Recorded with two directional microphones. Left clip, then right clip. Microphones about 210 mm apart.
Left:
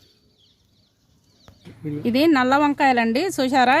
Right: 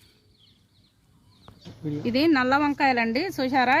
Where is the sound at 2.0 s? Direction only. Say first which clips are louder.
Left 4 dB; 50° left (ahead or behind).